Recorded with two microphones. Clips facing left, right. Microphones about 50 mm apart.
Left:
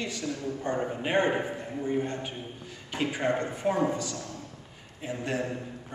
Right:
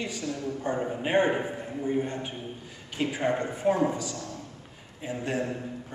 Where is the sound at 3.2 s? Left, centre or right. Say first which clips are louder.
Right 1 dB; centre.